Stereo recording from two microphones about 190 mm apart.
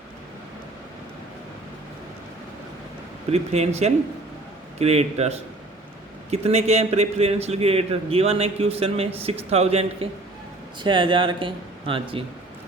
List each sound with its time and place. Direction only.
3.3 s a man's voice: 35° right (ahead or behind)